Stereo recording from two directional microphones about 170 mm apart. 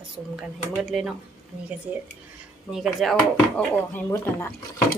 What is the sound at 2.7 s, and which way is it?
Speech, centre (ahead or behind).